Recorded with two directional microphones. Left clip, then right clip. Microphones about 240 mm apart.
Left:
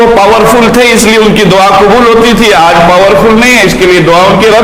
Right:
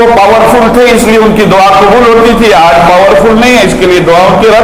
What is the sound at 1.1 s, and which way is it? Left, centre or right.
A man's voice, left.